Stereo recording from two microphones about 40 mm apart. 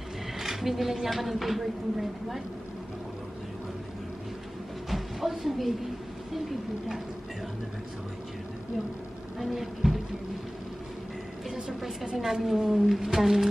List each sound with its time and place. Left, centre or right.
0.4 s speech: centre
4.8 s a sound: centre
9.4 s speech: centre
12.1 s a woman's voice: centre